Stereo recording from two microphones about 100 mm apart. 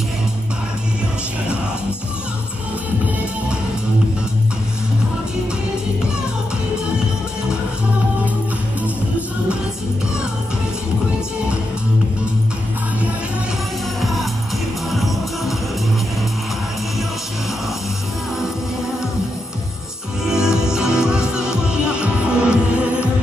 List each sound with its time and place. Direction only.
14.9 s music: centre (ahead or behind)
20.2 s music: 5° right (ahead or behind)